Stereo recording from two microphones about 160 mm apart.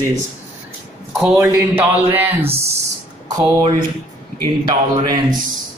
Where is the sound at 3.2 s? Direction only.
20° right (ahead or behind).